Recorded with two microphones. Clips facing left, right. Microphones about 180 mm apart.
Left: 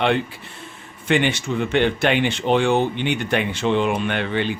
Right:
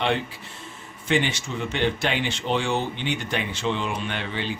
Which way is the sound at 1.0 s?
60° left (ahead or behind).